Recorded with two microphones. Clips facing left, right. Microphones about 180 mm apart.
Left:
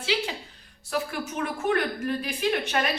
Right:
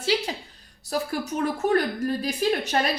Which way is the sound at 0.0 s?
40° right (ahead or behind).